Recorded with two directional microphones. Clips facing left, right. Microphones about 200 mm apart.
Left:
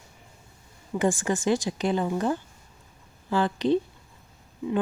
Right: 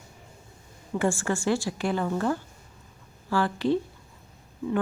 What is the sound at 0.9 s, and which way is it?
Speech, 20° left (ahead or behind).